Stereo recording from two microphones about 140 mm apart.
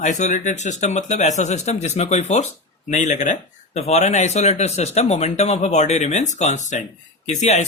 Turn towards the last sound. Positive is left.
turn(degrees=55)  # may be behind; listen again after turning